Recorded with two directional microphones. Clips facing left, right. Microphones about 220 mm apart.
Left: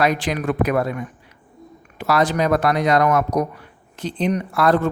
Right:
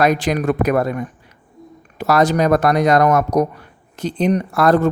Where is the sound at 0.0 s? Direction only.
45° right (ahead or behind).